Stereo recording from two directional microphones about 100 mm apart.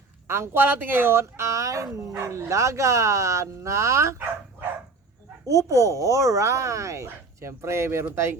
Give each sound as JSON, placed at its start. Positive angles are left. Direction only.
{"t": 0.3, "sound": "speech", "side_deg": -25}
{"t": 5.5, "sound": "speech", "side_deg": -30}